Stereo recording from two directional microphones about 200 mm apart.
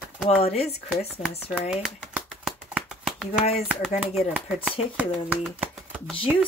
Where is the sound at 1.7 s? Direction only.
Centre (ahead or behind).